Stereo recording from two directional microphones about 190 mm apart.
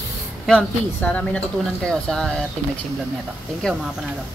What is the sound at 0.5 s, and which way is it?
A woman's voice, 5° left (ahead or behind).